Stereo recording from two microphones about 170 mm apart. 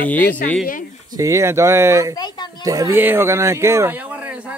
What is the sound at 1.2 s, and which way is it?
Speech, 20° right (ahead or behind).